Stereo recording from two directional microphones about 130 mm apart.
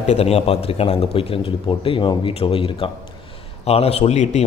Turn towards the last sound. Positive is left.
turn(degrees=60)  # may be behind; listen again after turning